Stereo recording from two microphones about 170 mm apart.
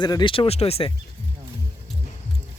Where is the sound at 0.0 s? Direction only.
25° left (ahead or behind).